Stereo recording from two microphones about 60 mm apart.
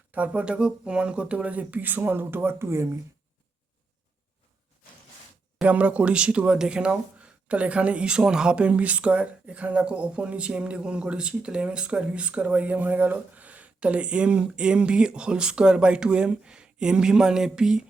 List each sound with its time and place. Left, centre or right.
0.1 s speech: right
5.6 s speech: right